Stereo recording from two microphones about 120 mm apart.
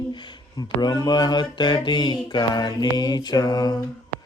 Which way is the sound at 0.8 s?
35° left (ahead or behind).